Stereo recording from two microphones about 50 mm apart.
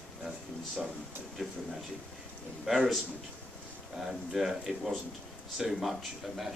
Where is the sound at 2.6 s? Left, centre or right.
Centre.